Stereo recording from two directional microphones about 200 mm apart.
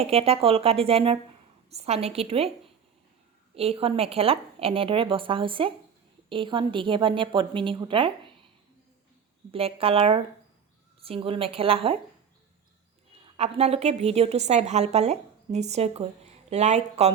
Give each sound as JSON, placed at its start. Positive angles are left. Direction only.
{"t": 0.0, "sound": "a woman's voice", "side_deg": -30}
{"t": 3.5, "sound": "a woman's voice", "side_deg": -30}
{"t": 9.5, "sound": "a woman's voice", "side_deg": -30}
{"t": 13.3, "sound": "a woman's voice", "side_deg": -30}